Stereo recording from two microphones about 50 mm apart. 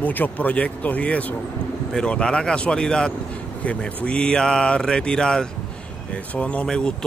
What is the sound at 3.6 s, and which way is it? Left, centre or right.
Speech, left.